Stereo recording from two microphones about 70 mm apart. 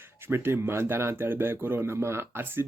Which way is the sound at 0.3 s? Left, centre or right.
Right.